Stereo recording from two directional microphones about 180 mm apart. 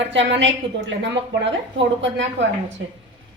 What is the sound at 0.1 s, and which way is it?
A woman's voice, 85° right.